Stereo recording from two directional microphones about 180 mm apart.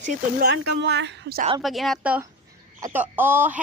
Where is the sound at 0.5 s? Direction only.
75° right (ahead or behind).